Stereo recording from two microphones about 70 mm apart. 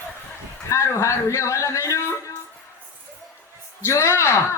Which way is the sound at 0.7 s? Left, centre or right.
Left.